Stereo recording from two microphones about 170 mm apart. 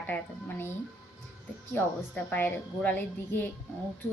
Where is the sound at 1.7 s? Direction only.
10° left (ahead or behind).